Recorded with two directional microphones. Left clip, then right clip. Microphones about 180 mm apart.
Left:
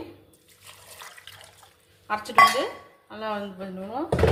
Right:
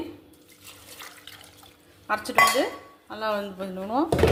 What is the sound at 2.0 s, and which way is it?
Speech, 35° right (ahead or behind).